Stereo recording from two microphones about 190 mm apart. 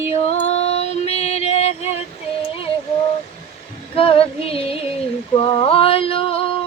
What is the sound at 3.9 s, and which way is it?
Female singing, 30° left (ahead or behind).